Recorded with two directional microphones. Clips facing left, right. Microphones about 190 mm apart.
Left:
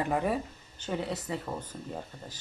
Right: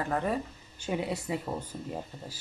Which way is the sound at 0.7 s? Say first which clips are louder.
Right 1 dB; 10° right (ahead or behind).